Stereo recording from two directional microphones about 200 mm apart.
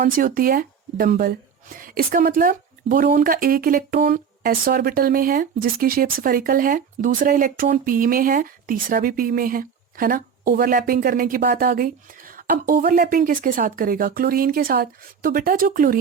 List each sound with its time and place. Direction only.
0.0 s speech: 45° right (ahead or behind)